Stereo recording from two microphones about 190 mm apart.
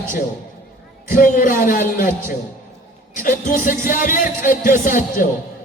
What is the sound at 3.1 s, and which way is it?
Speech, 45° left (ahead or behind).